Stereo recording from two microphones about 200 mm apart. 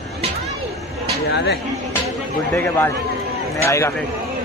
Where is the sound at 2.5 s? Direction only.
10° left (ahead or behind).